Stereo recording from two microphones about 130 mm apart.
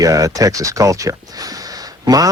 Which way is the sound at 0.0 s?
25° right (ahead or behind).